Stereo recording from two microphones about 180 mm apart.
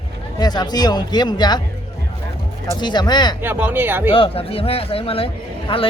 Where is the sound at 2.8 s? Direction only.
25° left (ahead or behind).